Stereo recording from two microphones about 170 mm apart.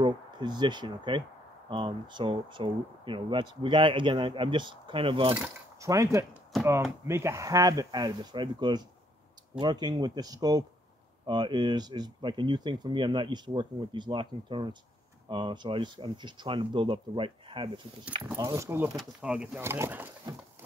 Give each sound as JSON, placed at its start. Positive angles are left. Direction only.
{"t": 0.0, "sound": "speech", "side_deg": -25}
{"t": 5.8, "sound": "speech", "side_deg": -20}
{"t": 18.2, "sound": "speech", "side_deg": -20}
{"t": 18.9, "sound": "speech", "side_deg": -5}